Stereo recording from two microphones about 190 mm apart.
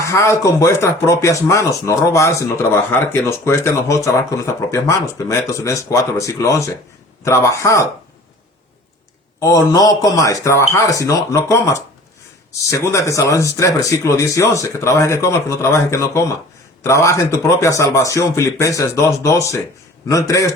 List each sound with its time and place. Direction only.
0.0 s speech: 15° left (ahead or behind)
9.4 s speech: 20° left (ahead or behind)